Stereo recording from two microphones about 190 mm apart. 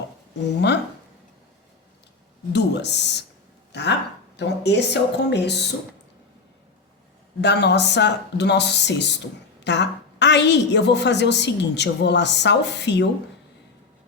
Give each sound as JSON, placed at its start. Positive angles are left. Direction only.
{"t": 2.5, "sound": "speech", "side_deg": 65}
{"t": 3.7, "sound": "a sound", "side_deg": 65}
{"t": 4.4, "sound": "speech", "side_deg": 65}
{"t": 7.4, "sound": "speech", "side_deg": 65}